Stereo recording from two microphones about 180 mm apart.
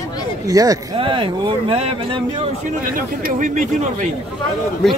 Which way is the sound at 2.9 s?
45° right (ahead or behind).